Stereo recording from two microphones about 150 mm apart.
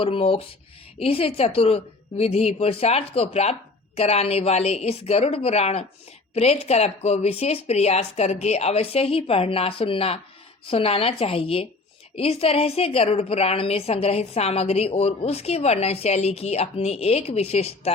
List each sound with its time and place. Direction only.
0.0 s a woman's voice: 40° left (ahead or behind)